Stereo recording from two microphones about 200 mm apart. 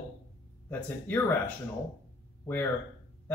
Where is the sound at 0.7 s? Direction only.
10° left (ahead or behind).